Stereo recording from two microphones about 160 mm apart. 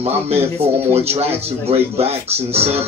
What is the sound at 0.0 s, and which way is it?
Speech, 40° right (ahead or behind).